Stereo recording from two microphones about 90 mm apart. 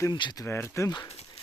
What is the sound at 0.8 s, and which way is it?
Speech, 45° left (ahead or behind).